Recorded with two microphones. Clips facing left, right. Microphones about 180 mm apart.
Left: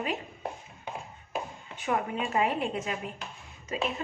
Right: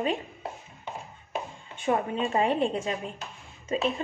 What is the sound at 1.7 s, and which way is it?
A woman's voice, 30° right (ahead or behind).